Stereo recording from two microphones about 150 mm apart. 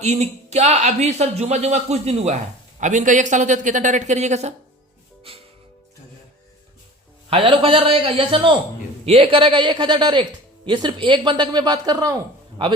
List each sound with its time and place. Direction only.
0.0 s speech: 45° right (ahead or behind)
7.3 s a man's voice: 40° right (ahead or behind)